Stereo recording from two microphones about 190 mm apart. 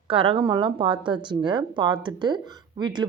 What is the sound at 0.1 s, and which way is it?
Speech, 25° right (ahead or behind).